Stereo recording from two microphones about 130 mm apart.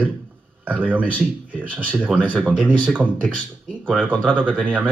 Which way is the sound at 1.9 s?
10° right (ahead or behind).